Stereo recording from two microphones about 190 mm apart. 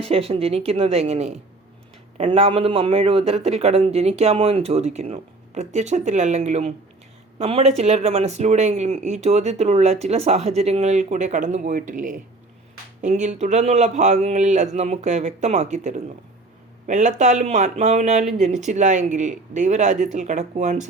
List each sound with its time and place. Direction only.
0.0 s speech: 30° right (ahead or behind)